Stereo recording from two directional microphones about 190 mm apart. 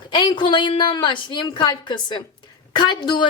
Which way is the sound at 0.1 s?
25° left (ahead or behind).